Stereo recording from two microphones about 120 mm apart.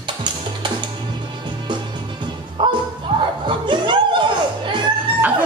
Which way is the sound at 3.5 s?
40° right (ahead or behind).